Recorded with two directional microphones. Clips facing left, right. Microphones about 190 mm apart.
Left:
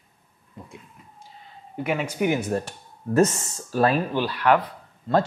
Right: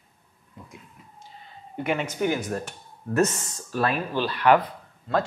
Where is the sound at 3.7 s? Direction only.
35° left (ahead or behind).